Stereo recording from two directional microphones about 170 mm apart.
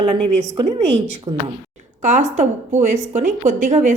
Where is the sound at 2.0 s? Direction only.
45° right (ahead or behind).